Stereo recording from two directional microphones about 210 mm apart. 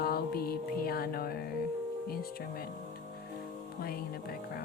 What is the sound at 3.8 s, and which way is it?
Speech, 45° left (ahead or behind).